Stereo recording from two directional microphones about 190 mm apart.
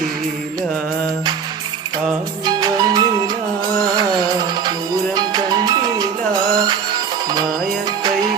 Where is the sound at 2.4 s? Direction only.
20° right (ahead or behind).